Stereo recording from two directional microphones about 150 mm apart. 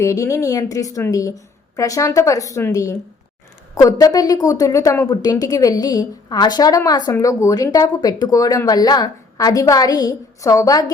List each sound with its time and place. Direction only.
0.0 s a woman's voice: 20° left (ahead or behind)